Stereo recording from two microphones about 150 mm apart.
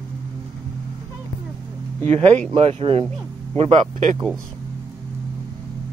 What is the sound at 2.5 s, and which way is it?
Speech, 40° right (ahead or behind).